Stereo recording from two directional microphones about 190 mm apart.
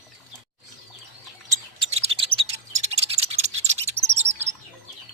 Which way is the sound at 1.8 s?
30° right (ahead or behind).